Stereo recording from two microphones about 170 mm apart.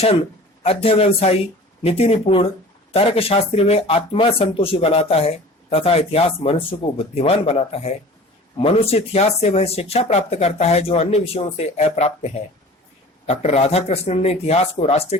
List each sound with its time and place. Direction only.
0.6 s speech: 35° left (ahead or behind)